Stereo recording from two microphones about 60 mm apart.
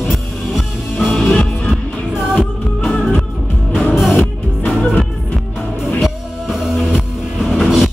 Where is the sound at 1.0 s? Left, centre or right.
Centre.